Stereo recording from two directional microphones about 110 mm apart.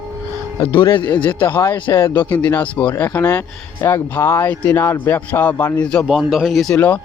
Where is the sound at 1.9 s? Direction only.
20° left (ahead or behind).